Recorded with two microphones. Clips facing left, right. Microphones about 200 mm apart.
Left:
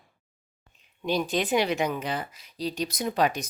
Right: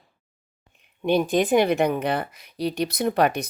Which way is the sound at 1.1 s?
55° right (ahead or behind).